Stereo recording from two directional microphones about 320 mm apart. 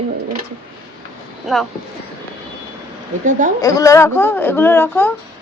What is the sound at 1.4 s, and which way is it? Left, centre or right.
Speech, centre.